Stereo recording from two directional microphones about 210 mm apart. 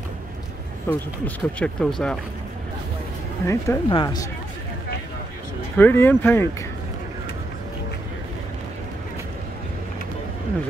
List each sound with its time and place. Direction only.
0.8 s speech: 5° left (ahead or behind)
3.4 s speech: 15° left (ahead or behind)
5.8 s speech: 10° left (ahead or behind)